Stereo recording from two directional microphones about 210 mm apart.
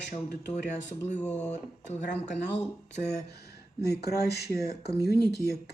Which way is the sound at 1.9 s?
30° left (ahead or behind).